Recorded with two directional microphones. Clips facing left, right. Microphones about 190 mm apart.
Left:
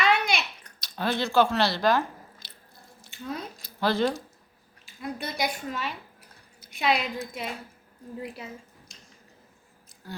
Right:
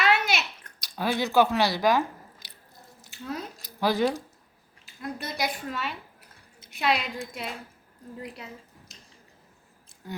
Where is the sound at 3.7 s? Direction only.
15° right (ahead or behind).